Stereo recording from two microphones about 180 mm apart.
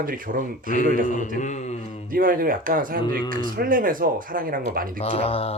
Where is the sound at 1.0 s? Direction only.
45° left (ahead or behind).